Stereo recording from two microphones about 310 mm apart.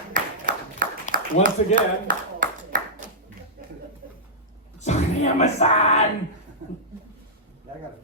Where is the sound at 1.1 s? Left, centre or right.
Right.